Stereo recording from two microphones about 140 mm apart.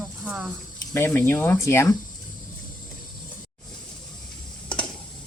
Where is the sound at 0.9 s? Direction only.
15° left (ahead or behind).